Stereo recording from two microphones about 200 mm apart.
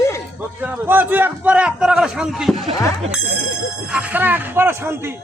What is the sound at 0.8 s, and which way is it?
A man's voice, 10° right (ahead or behind).